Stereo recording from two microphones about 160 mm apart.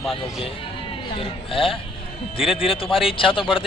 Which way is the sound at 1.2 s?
35° left (ahead or behind).